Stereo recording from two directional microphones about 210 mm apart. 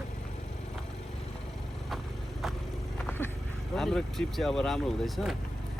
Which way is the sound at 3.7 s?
Centre (ahead or behind).